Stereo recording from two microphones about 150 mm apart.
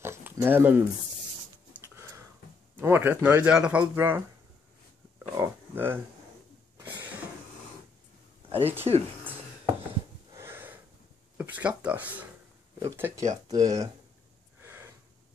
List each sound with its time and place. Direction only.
0.0 s a sound: 15° right (ahead or behind)
2.8 s speech: 15° right (ahead or behind)
5.3 s speech: 15° right (ahead or behind)
8.5 s speech: 40° right (ahead or behind)
10.3 s wheeze: 15° right (ahead or behind)
11.3 s speech: 10° right (ahead or behind)
14.6 s gasp: 15° right (ahead or behind)